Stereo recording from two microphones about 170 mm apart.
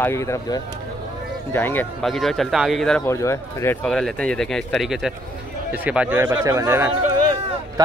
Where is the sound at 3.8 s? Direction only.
5° left (ahead or behind).